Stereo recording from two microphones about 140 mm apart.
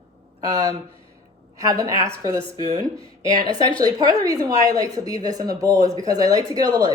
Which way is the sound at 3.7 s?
25° right (ahead or behind).